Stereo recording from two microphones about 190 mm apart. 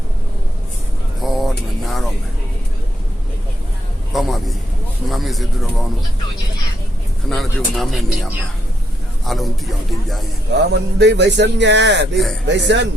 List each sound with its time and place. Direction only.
1.2 s a sound: centre (ahead or behind)
4.1 s a sound: centre (ahead or behind)
7.3 s speech: centre (ahead or behind)
10.5 s speech: 65° right (ahead or behind)
12.1 s speech: centre (ahead or behind)
12.5 s speech: 70° right (ahead or behind)